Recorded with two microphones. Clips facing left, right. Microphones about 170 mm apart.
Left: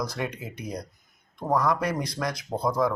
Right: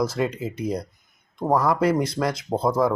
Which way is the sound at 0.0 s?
25° right (ahead or behind).